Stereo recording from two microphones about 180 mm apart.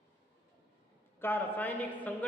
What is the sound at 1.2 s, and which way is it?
Speech, 10° left (ahead or behind).